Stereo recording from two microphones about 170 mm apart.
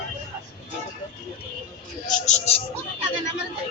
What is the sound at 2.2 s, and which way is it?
Speech, 40° left (ahead or behind).